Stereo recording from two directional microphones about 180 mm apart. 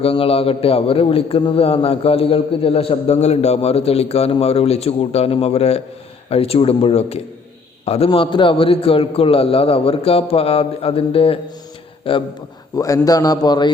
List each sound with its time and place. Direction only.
0.0 s a man's voice: 30° left (ahead or behind)
12.7 s a man's voice: 20° left (ahead or behind)